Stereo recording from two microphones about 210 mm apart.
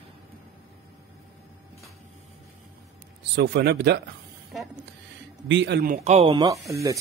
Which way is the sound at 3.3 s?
55° right (ahead or behind).